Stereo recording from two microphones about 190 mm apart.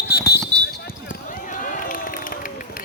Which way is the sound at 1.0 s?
45° left (ahead or behind).